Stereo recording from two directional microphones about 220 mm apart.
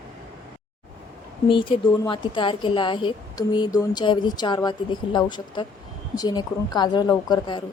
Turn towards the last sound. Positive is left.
turn(degrees=20)  # may be behind; listen again after turning